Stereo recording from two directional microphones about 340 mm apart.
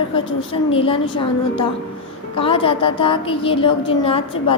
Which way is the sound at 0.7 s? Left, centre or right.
Centre.